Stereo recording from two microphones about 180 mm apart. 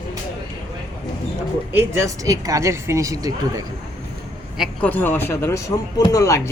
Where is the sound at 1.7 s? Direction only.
15° right (ahead or behind).